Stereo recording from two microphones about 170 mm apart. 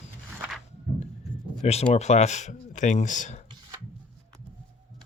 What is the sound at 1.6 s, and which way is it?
Speech, 35° left (ahead or behind).